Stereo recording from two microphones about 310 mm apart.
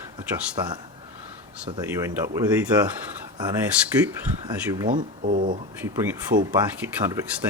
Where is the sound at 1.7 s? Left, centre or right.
Centre.